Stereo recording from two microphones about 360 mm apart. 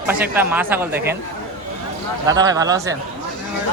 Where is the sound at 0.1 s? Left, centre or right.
Centre.